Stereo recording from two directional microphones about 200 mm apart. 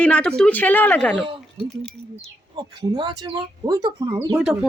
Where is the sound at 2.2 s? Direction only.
20° right (ahead or behind).